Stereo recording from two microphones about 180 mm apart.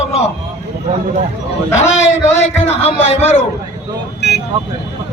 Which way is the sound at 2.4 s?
35° left (ahead or behind).